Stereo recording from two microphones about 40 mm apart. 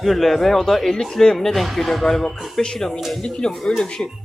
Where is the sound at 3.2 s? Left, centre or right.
Centre.